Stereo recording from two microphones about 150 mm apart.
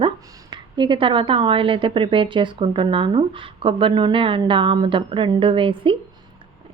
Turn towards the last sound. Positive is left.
turn(degrees=-35)  # may be behind; listen again after turning